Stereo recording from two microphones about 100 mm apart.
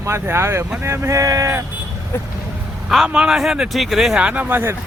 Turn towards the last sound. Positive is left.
turn(degrees=-20)  # may be behind; listen again after turning